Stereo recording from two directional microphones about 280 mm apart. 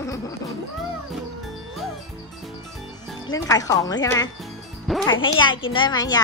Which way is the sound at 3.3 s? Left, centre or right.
Centre.